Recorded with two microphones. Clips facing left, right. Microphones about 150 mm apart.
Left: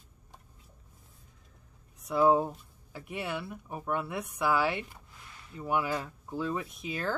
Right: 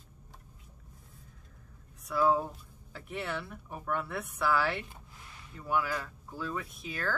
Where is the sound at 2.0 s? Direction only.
20° left (ahead or behind).